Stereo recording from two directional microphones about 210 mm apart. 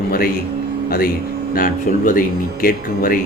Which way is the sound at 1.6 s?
40° left (ahead or behind).